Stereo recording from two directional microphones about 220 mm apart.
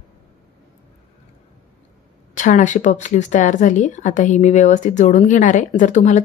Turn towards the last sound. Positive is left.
turn(degrees=35)  # may be behind; listen again after turning